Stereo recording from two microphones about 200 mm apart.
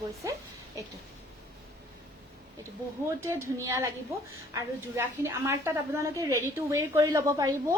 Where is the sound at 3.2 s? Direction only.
15° right (ahead or behind).